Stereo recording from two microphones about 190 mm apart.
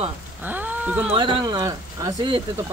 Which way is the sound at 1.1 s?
25° right (ahead or behind).